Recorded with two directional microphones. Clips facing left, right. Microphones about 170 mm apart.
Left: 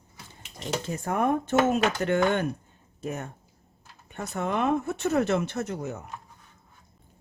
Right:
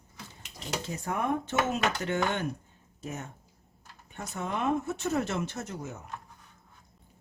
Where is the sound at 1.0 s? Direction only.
50° left (ahead or behind).